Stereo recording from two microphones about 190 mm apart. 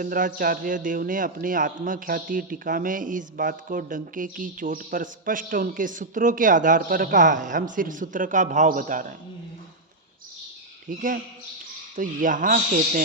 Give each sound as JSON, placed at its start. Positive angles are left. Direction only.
{"t": 0.0, "sound": "a man's voice", "side_deg": -45}
{"t": 10.8, "sound": "a man's voice", "side_deg": -45}